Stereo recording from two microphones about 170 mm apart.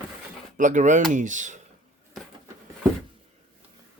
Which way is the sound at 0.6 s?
50° right (ahead or behind).